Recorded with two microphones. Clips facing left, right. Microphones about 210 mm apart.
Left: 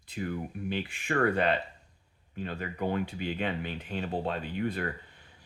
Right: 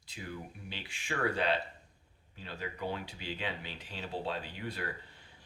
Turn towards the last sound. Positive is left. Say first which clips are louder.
# left 8 dB
turn(degrees=55)  # may be behind; listen again after turning